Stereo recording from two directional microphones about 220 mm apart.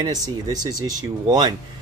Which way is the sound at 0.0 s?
15° right (ahead or behind).